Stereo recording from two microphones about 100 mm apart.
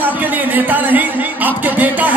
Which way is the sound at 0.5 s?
15° right (ahead or behind).